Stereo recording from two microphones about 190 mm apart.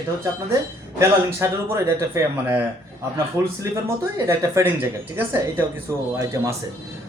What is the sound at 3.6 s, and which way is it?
Speech, 15° right (ahead or behind).